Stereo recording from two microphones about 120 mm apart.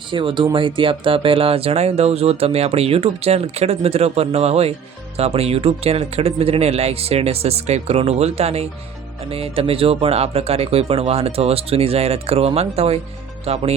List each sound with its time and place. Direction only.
0.1 s speech: 45° right (ahead or behind)